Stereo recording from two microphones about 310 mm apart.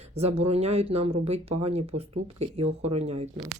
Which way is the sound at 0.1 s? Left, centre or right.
Centre.